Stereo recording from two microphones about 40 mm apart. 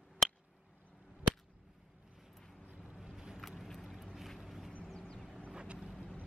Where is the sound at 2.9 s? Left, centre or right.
Centre.